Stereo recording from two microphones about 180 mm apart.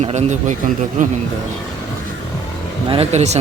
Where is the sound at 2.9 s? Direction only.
35° right (ahead or behind).